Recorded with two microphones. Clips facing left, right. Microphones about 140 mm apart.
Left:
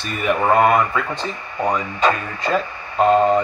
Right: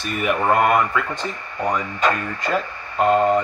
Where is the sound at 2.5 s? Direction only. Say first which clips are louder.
Left 3 dB; 10° right (ahead or behind).